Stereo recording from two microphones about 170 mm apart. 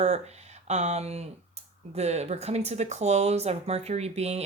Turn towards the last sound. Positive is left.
turn(degrees=-40)  # may be behind; listen again after turning